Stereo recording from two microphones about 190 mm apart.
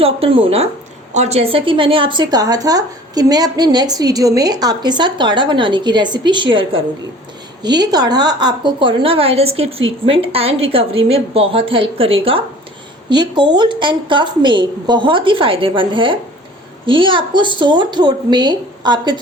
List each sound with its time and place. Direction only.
0.0 s a woman's voice: 30° right (ahead or behind)